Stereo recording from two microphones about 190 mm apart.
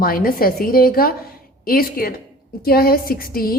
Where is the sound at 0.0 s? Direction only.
50° left (ahead or behind).